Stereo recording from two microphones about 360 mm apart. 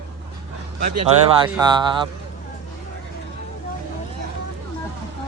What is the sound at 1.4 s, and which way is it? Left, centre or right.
Speech, centre.